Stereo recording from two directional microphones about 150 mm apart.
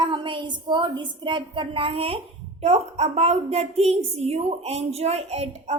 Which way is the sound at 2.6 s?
45° right (ahead or behind).